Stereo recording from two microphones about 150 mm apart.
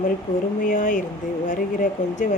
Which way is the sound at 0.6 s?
60° left (ahead or behind).